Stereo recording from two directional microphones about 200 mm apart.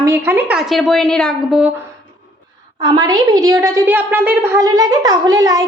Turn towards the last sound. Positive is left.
turn(degrees=-15)  # may be behind; listen again after turning